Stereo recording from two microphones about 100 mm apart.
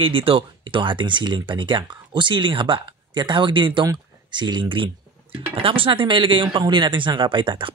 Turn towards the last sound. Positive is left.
turn(degrees=-55)  # may be behind; listen again after turning